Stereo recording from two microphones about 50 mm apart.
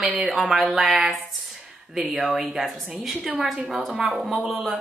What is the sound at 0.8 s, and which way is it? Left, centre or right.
Speech, centre.